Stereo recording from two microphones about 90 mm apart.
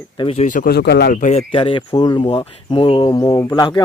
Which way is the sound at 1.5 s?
80° left.